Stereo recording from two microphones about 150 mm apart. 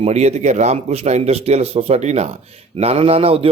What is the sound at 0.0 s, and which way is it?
A man's voice, 45° right (ahead or behind).